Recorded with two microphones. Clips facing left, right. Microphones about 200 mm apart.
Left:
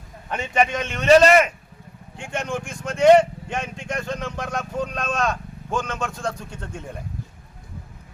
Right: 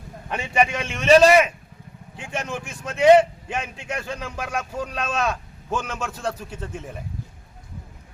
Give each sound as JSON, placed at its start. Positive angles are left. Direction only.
{"t": 0.3, "sound": "speech", "side_deg": -10}